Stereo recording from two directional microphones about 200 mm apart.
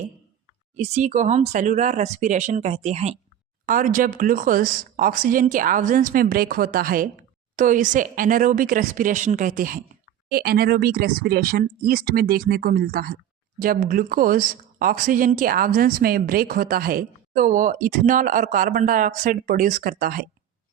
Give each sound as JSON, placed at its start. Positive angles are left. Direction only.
{"t": 0.9, "sound": "speech", "side_deg": -35}